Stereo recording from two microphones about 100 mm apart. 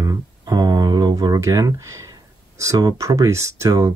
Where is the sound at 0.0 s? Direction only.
35° right (ahead or behind).